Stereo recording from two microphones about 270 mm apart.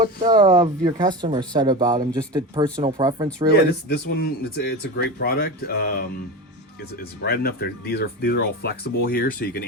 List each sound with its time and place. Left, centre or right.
0.2 s speech: centre
3.5 s speech: left